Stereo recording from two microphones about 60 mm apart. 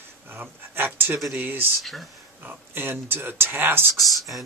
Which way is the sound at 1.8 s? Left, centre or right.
Centre.